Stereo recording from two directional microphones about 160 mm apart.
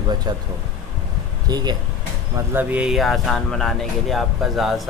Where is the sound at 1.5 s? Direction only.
25° right (ahead or behind).